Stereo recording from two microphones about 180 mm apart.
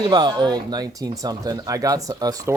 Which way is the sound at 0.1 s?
25° right (ahead or behind).